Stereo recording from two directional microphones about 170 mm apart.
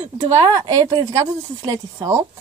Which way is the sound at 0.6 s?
20° right (ahead or behind).